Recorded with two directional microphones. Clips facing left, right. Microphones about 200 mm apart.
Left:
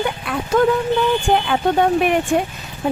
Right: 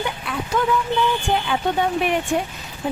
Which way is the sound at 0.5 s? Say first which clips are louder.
Left 5 dB; 50° left (ahead or behind).